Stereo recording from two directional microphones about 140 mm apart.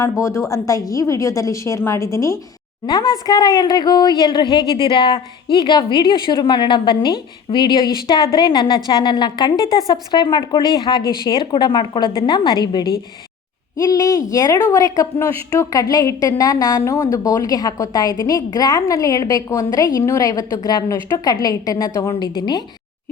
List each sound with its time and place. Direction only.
0.0 s a woman's voice: 20° left (ahead or behind)